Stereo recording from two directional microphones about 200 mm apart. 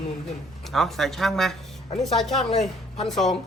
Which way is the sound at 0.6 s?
Centre (ahead or behind).